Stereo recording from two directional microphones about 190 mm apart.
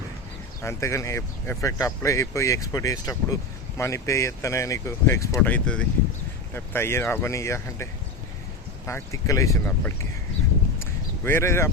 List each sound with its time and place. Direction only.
0.6 s speech: 15° left (ahead or behind)
8.9 s speech: 15° left (ahead or behind)
11.2 s speech: 10° left (ahead or behind)